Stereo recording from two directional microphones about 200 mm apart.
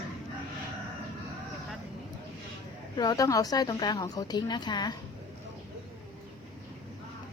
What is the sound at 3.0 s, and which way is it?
A woman's voice, 20° left (ahead or behind).